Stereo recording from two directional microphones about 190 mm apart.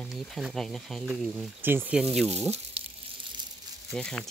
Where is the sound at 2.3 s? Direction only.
35° right (ahead or behind).